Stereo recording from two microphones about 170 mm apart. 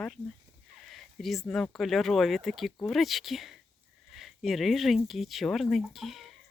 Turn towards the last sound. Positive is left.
turn(degrees=0)  # may be behind; listen again after turning